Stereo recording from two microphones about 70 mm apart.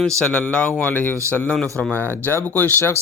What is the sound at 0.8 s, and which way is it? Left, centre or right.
Music, left.